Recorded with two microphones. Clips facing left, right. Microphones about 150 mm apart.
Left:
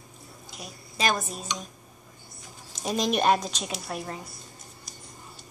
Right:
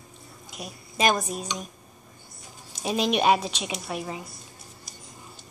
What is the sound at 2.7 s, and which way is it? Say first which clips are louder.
A woman's voice: right 1 dB; 10° right (ahead or behind).